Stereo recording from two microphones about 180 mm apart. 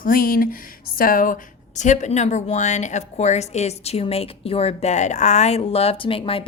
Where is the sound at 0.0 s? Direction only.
50° left (ahead or behind).